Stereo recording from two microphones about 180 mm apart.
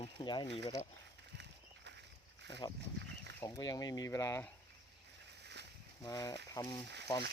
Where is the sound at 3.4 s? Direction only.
20° left (ahead or behind).